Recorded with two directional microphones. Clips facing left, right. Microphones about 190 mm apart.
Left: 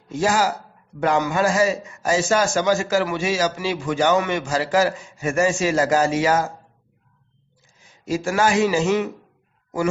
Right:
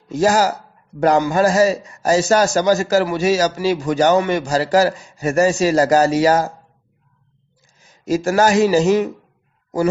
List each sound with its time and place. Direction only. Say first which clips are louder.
0.1 s a man's voice: right 4 dB; 40° right (ahead or behind)
7.8 s a man's voice: right 5 dB; 40° right (ahead or behind)